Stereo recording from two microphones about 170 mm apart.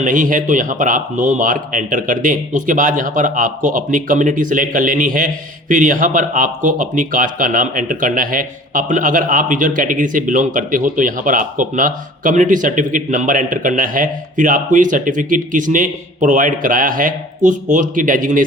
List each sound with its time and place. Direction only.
0.0 s speech: 50° right (ahead or behind)